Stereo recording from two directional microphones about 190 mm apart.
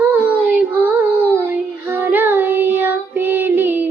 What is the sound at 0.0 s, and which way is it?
Child singing, 10° right (ahead or behind).